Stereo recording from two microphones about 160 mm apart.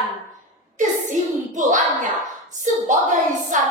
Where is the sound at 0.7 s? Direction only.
50° right (ahead or behind).